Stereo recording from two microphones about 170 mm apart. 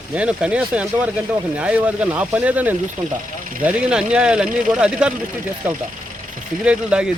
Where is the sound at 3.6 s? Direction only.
5° right (ahead or behind).